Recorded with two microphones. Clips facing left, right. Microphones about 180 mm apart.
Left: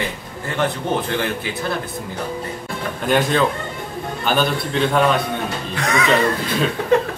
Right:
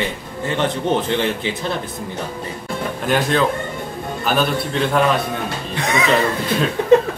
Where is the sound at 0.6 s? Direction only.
20° right (ahead or behind).